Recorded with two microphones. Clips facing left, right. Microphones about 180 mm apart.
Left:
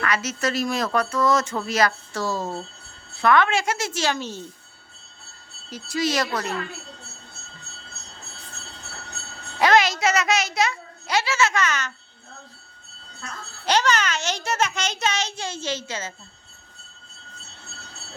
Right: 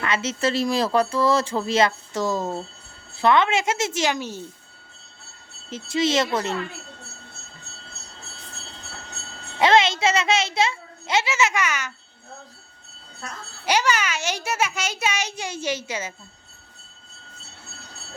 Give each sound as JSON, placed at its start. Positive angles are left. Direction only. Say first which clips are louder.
{"t": 0.0, "sound": "speech", "louder": "right 1 dB", "side_deg": -25}
{"t": 5.7, "sound": "speech", "louder": "right 3 dB", "side_deg": -25}
{"t": 9.6, "sound": "a child's voice", "louder": "right 1 dB", "side_deg": -25}
{"t": 13.7, "sound": "a child's voice", "louder": "left 1 dB", "side_deg": -10}